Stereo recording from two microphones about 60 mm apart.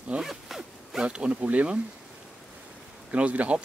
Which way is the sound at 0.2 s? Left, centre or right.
Centre.